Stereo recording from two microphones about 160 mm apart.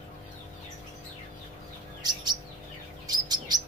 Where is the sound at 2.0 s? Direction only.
25° right (ahead or behind).